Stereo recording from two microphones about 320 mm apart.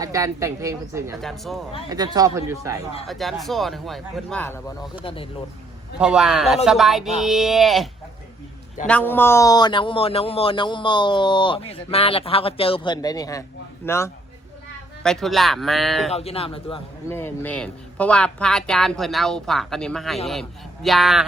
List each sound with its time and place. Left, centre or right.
0.0 s a man's voice: centre
1.9 s a man's voice: centre
6.0 s a man's voice: centre
8.9 s a man's voice: centre
16.1 s a man's voice: centre